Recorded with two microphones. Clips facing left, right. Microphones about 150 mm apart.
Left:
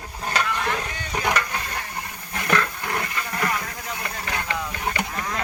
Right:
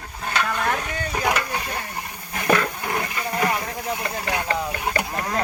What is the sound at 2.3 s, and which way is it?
Dog, 20° right (ahead or behind).